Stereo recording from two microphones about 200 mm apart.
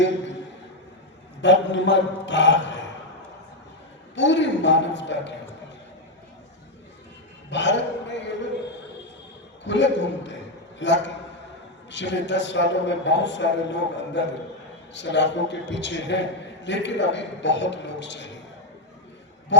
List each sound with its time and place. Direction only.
1.4 s a man's voice: 65° left (ahead or behind)
4.1 s a man's voice: 65° left (ahead or behind)
7.5 s a man's voice: 65° left (ahead or behind)
9.6 s a man's voice: 65° left (ahead or behind)